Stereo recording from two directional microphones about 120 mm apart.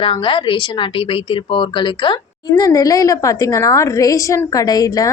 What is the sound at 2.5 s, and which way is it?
A woman's voice, 30° left (ahead or behind).